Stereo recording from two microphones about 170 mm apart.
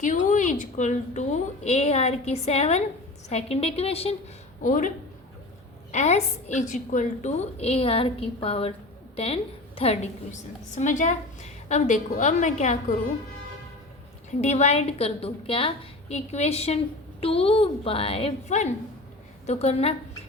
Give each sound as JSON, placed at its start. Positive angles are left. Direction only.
{"t": 0.0, "sound": "a woman's voice", "side_deg": 45}
{"t": 4.6, "sound": "a woman's voice", "side_deg": 50}
{"t": 5.9, "sound": "a woman's voice", "side_deg": 40}
{"t": 14.4, "sound": "a woman's voice", "side_deg": 40}